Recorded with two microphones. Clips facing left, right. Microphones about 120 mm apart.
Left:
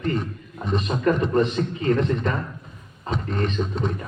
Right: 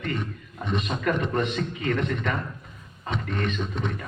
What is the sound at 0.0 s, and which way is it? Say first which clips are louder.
A man's voice: left 5 dB; 35° left (ahead or behind).